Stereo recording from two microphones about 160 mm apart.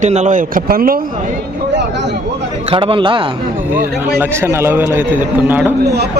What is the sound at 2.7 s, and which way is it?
Speech, 35° right (ahead or behind).